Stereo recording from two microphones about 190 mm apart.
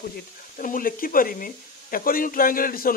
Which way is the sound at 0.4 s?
45° left (ahead or behind).